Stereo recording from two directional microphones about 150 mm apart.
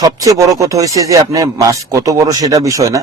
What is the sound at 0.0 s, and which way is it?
Speech, 25° right (ahead or behind).